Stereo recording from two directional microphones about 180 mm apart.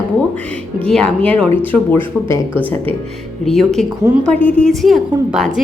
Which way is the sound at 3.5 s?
Centre (ahead or behind).